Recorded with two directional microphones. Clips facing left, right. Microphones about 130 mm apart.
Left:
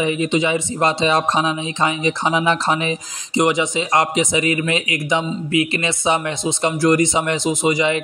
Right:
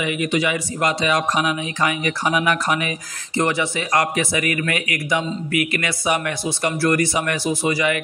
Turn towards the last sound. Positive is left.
turn(degrees=25)  # may be behind; listen again after turning